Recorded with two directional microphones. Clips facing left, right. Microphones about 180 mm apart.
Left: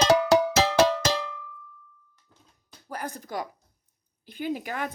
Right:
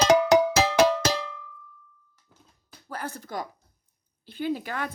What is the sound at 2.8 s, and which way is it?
Speech, 15° left (ahead or behind).